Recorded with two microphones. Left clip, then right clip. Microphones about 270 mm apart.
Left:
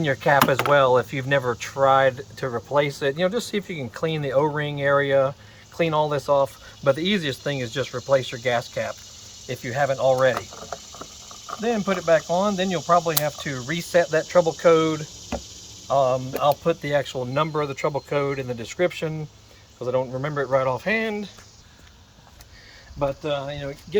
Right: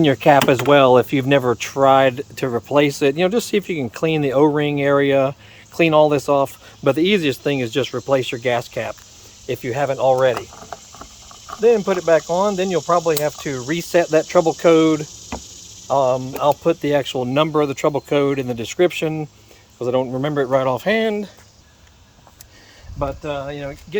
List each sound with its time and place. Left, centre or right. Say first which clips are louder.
0.0 s speech: right 6 dB; right
10.3 s boiling: right 2 dB; centre
11.6 s speech: right 8 dB; right
23.0 s speech: right 1 dB; centre